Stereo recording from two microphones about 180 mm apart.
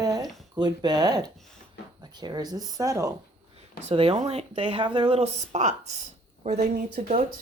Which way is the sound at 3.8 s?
30° right (ahead or behind).